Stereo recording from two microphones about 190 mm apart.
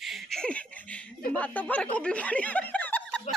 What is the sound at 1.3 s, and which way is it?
Speech, 5° left (ahead or behind).